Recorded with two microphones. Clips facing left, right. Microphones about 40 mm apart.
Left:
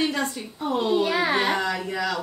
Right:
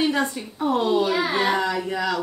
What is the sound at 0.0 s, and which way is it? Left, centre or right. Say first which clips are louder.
Speech: right 3 dB; centre.